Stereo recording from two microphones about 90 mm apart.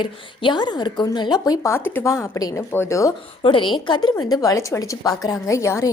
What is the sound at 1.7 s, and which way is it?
Speech, 25° left (ahead or behind).